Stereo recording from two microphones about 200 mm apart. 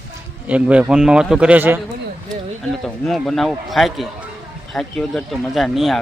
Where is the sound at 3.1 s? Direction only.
Centre (ahead or behind).